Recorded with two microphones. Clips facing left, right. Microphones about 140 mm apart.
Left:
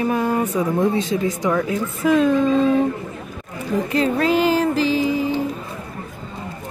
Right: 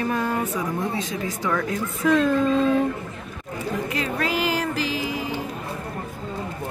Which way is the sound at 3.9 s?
30° left (ahead or behind).